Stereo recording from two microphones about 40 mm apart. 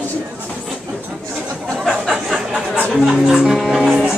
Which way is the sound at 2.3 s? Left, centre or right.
Centre.